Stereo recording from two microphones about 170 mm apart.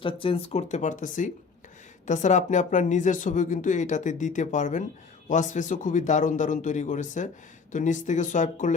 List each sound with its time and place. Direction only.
0.0 s speech: 30° left (ahead or behind); by 8.7 s 45° left (ahead or behind)